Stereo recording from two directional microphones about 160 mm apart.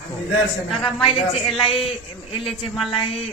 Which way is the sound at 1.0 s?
35° left (ahead or behind).